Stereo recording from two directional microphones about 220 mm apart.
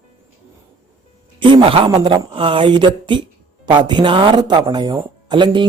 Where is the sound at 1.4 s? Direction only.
25° right (ahead or behind).